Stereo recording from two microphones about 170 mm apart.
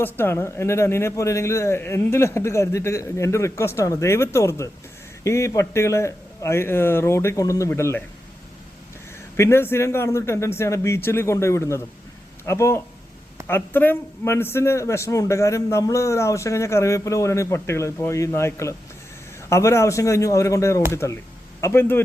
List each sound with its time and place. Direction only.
0.0 s a man's voice: 15° left (ahead or behind)
9.3 s a man's voice: 15° left (ahead or behind)